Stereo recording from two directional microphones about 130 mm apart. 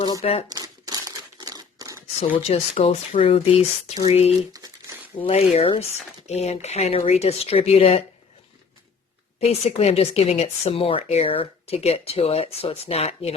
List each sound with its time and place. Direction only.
0.2 s speech: 50° left (ahead or behind)
0.4 s crumpling: 30° right (ahead or behind)
2.4 s speech: 50° left (ahead or behind)
9.4 s speech: 50° left (ahead or behind)